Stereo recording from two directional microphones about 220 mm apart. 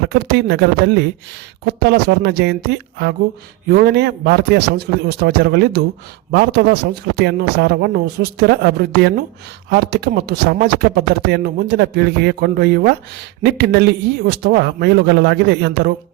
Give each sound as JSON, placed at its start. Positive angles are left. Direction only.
{"t": 0.1, "sound": "a man's voice", "side_deg": -50}